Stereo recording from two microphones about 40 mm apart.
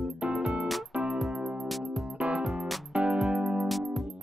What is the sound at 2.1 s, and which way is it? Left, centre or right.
Music, right.